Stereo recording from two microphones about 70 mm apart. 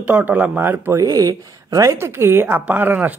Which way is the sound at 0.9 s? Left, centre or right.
Right.